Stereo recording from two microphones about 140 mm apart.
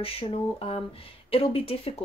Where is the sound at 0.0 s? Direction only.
40° left (ahead or behind).